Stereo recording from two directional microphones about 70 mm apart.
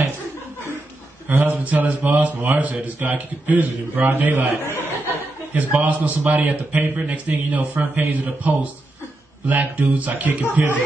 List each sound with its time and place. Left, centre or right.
1.3 s speech: right
5.5 s speech: right